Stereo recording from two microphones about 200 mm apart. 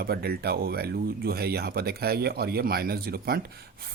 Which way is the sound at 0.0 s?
50° right (ahead or behind).